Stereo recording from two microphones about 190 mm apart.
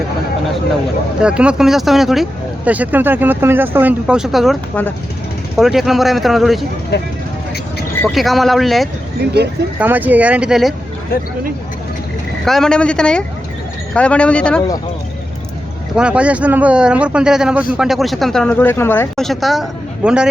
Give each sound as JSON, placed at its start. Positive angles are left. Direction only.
{"t": 1.2, "sound": "a woman's voice", "side_deg": -5}
{"t": 6.9, "sound": "speech", "side_deg": 60}
{"t": 8.0, "sound": "a woman's voice", "side_deg": 0}
{"t": 12.5, "sound": "a woman's voice", "side_deg": 0}
{"t": 16.0, "sound": "a woman's voice", "side_deg": -5}